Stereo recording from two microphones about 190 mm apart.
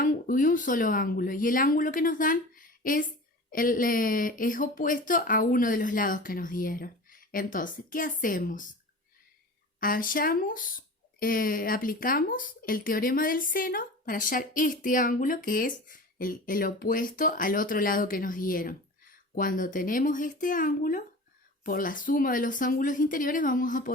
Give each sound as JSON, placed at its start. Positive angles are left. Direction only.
{"t": 0.0, "sound": "speech", "side_deg": 45}
{"t": 9.8, "sound": "speech", "side_deg": 45}